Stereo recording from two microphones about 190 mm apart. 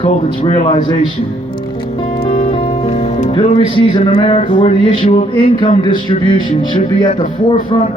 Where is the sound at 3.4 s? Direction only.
25° left (ahead or behind).